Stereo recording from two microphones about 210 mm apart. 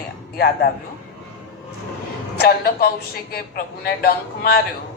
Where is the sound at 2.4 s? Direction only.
45° left (ahead or behind).